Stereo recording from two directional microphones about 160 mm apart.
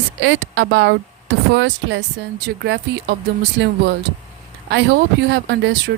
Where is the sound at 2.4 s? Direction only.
90° right.